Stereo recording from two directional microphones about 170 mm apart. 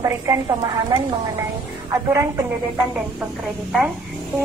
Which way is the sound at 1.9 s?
20° right (ahead or behind).